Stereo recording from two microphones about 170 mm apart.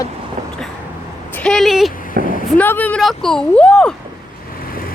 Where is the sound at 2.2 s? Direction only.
60° right (ahead or behind).